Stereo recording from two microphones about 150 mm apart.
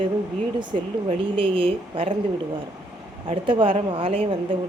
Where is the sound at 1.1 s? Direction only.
35° right (ahead or behind).